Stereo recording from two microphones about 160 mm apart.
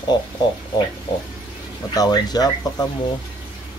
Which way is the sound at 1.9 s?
25° left (ahead or behind).